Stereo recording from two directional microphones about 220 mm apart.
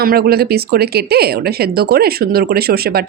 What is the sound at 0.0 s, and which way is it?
Speech, 45° right (ahead or behind).